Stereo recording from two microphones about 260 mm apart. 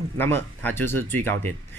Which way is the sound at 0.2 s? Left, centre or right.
Centre.